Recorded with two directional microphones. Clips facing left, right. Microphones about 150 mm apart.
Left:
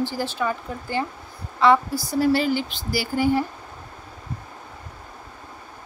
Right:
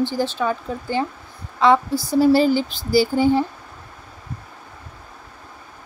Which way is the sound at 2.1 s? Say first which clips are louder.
Right 5 dB; 30° right (ahead or behind).